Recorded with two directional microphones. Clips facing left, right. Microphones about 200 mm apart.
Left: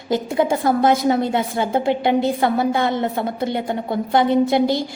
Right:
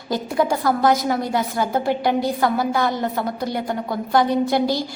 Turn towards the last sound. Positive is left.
turn(degrees=20)  # may be behind; listen again after turning